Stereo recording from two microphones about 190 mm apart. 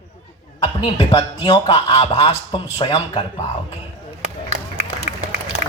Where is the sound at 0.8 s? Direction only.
30° left (ahead or behind).